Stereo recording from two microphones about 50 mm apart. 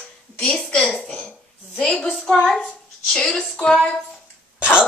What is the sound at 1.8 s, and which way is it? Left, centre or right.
A woman's voice, left.